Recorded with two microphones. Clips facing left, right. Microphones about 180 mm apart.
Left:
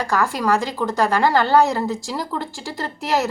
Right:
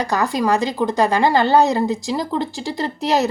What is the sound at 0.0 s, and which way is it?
Speech, 15° right (ahead or behind).